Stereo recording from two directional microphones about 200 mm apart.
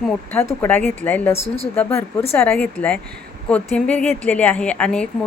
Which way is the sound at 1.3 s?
30° left (ahead or behind).